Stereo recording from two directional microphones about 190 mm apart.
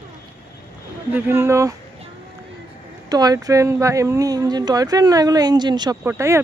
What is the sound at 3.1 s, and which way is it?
Speech, 20° right (ahead or behind).